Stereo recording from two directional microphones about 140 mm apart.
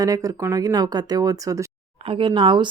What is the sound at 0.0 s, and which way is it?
Speech, 25° right (ahead or behind).